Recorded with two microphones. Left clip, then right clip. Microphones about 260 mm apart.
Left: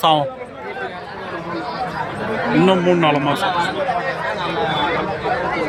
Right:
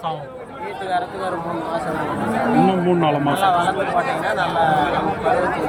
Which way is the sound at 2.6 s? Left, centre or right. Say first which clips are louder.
Left 3 dB; centre.